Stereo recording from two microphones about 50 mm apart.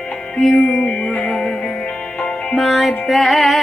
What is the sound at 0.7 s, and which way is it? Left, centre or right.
Music, centre.